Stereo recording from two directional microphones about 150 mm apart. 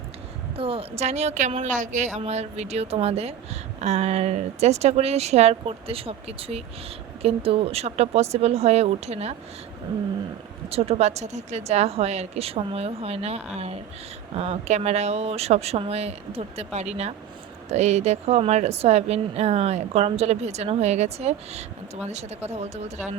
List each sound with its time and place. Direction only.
0.5 s a woman's voice: 40° right (ahead or behind)
10.7 s a woman's voice: 40° right (ahead or behind)